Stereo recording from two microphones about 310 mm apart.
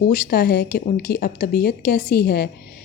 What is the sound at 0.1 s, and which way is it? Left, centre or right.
Speech, left.